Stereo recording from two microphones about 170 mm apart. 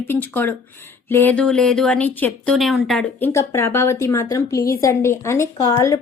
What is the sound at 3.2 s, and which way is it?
Speech, 15° left (ahead or behind).